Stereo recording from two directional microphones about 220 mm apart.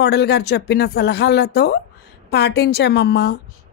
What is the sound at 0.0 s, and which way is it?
Speech, 50° left (ahead or behind).